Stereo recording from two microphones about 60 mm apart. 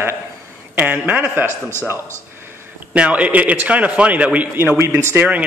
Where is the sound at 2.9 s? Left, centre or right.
Right.